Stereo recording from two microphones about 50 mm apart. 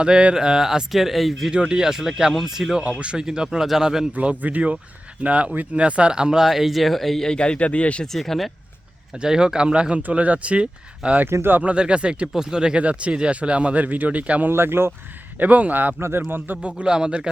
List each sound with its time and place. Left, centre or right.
0.0 s speech: centre
1.5 s speech: centre
2.8 s speech: right
4.1 s speech: right
6.4 s speech: centre
7.3 s speech: left
8.0 s speech: centre
9.1 s speech: centre
12.3 s speech: centre; by 14.4 s right
14.4 s speech: right
15.4 s speech: right
16.0 s speech: right
16.6 s speech: right